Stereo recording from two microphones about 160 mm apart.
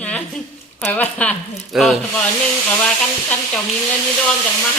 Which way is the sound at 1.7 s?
Centre (ahead or behind).